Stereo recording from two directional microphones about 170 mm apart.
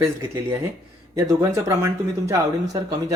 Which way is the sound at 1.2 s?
20° right (ahead or behind).